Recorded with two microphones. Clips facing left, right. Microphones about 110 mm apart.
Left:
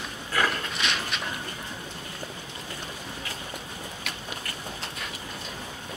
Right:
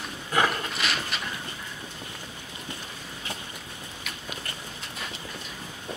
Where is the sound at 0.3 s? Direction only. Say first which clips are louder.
Right 2 dB; 20° right (ahead or behind).